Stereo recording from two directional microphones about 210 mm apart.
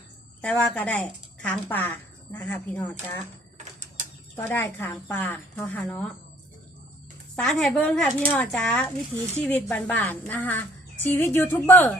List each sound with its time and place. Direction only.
0.4 s a woman's voice: 5° left (ahead or behind)
3.6 s a sound: 35° right (ahead or behind)
4.4 s a woman's voice: 10° left (ahead or behind)
7.4 s a woman's voice: 5° left (ahead or behind)